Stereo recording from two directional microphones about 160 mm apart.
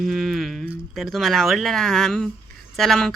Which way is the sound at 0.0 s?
Centre (ahead or behind).